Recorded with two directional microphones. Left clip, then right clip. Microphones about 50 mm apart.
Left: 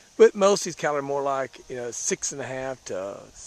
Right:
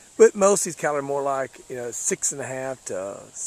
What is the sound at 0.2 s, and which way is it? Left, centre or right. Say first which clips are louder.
Speech: right 1 dB; left.